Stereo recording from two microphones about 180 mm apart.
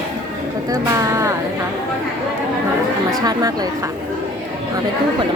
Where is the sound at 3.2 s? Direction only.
20° right (ahead or behind).